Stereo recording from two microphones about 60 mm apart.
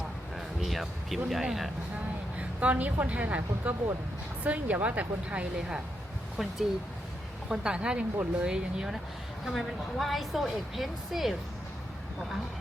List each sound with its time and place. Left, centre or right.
0.3 s music: centre
1.3 s speech: centre
2.6 s a woman's voice: right
6.3 s speech: centre
9.5 s speech: centre